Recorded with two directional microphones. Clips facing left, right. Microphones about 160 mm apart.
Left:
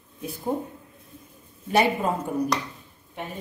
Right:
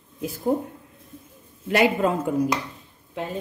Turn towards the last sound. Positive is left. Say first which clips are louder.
# right 5 dB
turn(degrees=-90)